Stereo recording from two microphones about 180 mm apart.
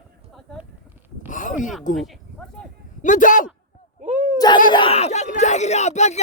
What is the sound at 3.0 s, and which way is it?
Speech, 45° left (ahead or behind).